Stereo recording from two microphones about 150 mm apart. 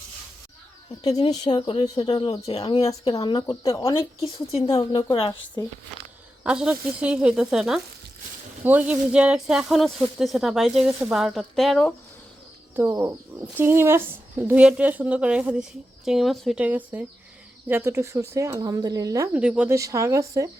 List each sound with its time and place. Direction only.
1.3 s speech: 30° left (ahead or behind)
2.7 s speech: 20° left (ahead or behind)
3.9 s speech: 40° left (ahead or behind)
4.8 s speech: 25° left (ahead or behind)
6.4 s a woman's voice: 5° right (ahead or behind)
12.7 s a woman's voice: 15° right (ahead or behind); by 16.6 s centre (ahead or behind)
16.6 s a woman's voice: 10° right (ahead or behind)
19.3 s a woman's voice: 10° right (ahead or behind)
19.7 s speech: 20° right (ahead or behind)